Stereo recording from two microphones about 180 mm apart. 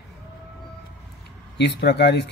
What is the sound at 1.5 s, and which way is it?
Speech, 70° left (ahead or behind).